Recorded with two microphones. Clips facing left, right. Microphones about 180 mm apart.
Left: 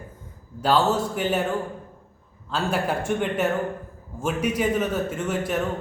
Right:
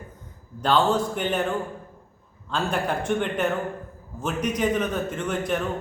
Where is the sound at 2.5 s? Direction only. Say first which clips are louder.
Left 1 dB; 5° left (ahead or behind).